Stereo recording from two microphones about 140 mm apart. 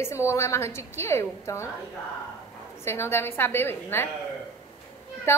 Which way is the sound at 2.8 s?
15° left (ahead or behind).